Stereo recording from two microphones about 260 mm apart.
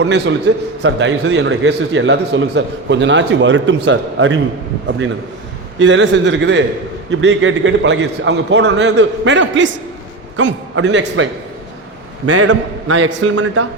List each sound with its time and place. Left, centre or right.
0.0 s a man's voice: right
5.8 s a man's voice: right
12.2 s a man's voice: right